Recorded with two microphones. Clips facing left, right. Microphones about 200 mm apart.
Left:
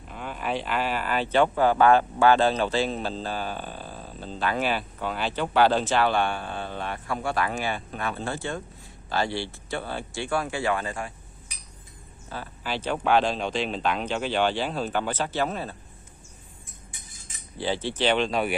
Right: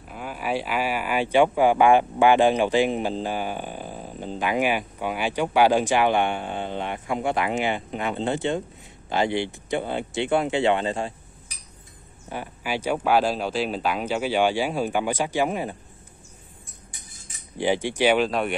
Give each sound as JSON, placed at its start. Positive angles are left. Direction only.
{"t": 0.1, "sound": "speech", "side_deg": -5}
{"t": 12.3, "sound": "speech", "side_deg": -15}
{"t": 17.6, "sound": "speech", "side_deg": -15}